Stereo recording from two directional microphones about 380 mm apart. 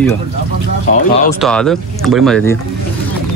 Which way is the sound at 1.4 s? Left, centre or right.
Centre.